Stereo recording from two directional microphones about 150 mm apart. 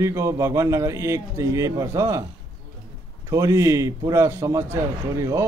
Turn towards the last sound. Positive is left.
turn(degrees=-20)  # may be behind; listen again after turning